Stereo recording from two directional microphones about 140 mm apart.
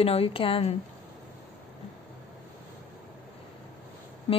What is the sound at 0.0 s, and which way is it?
Speech, 45° left (ahead or behind).